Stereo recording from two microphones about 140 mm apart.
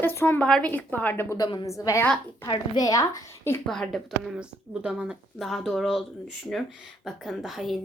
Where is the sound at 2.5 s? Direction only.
30° left (ahead or behind).